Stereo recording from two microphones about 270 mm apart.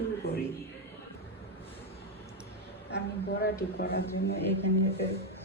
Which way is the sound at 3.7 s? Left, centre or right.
Left.